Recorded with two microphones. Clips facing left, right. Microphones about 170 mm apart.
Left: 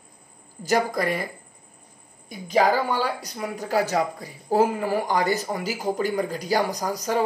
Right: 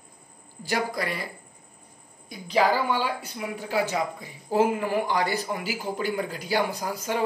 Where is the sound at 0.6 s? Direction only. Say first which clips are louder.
Left 5 dB; 45° left (ahead or behind).